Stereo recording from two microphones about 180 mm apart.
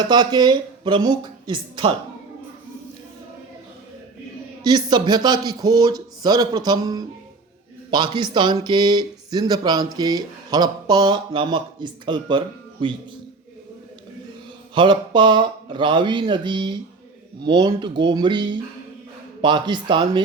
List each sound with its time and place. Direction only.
0.0 s speech: 25° right (ahead or behind)
4.6 s speech: 25° right (ahead or behind)
14.8 s speech: 25° right (ahead or behind)